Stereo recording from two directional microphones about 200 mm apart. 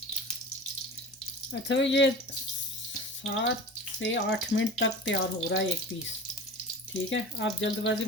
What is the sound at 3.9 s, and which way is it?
Speech, 65° left (ahead or behind).